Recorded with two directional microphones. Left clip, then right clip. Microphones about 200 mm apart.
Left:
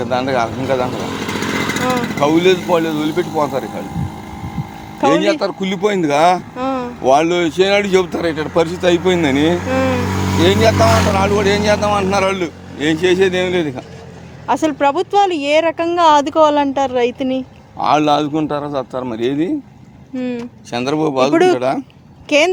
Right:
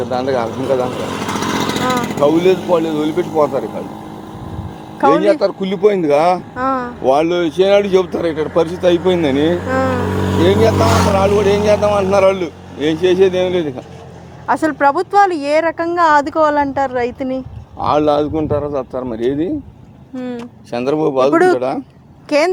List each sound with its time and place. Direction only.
0.1 s a man's voice: 55° left (ahead or behind)
1.0 s vehicle: 30° right (ahead or behind)
1.5 s vehicle: 5° right (ahead or behind)
2.2 s speech: 55° left (ahead or behind)
5.1 s speech: 50° left (ahead or behind)
6.6 s speech: 5° left (ahead or behind)
7.0 s a man's voice: 55° left (ahead or behind)
10.1 s speech: 40° left (ahead or behind)
10.4 s a man's voice: 60° left (ahead or behind)
14.4 s speech: 5° left (ahead or behind)
17.7 s a man's voice: 55° left (ahead or behind)
20.7 s a man's voice: 50° left (ahead or behind)